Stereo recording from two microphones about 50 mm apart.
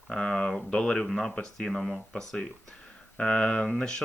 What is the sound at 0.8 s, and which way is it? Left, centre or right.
Speech, centre.